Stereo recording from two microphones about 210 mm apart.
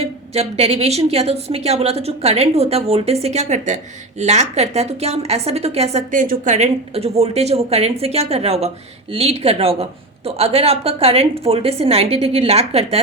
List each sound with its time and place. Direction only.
0.0 s a woman's voice: 30° right (ahead or behind)